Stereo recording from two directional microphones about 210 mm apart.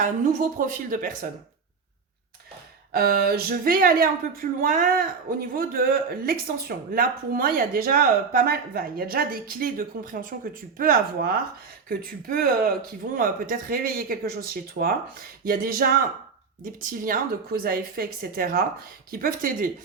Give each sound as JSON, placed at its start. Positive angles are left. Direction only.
{"t": 0.7, "sound": "speech", "side_deg": -40}
{"t": 2.9, "sound": "a woman's voice", "side_deg": -45}